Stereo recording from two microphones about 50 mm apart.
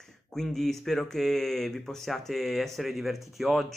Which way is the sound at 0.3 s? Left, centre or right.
Centre.